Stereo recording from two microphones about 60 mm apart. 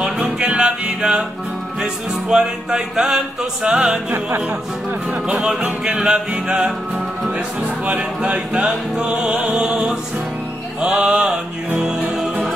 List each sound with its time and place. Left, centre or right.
0.2 s music: centre
5.6 s music: centre
7.8 s music: right
10.9 s music: centre